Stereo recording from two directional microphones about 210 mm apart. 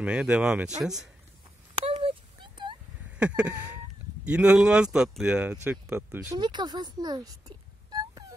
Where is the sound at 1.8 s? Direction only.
25° right (ahead or behind).